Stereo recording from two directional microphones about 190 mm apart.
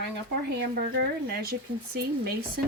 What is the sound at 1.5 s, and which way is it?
Speech, 55° right (ahead or behind).